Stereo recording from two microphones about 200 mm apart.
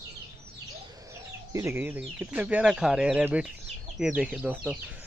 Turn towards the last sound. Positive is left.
turn(degrees=-5)  # may be behind; listen again after turning